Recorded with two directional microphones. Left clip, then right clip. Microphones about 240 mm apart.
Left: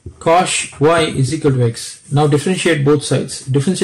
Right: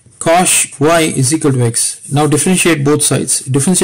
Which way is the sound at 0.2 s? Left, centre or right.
Right.